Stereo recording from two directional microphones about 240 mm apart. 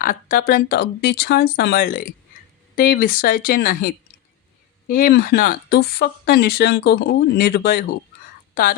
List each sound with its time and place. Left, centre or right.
0.0 s speech: left